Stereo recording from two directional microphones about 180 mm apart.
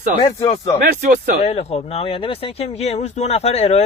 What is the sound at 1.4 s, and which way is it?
Speech, 35° left (ahead or behind).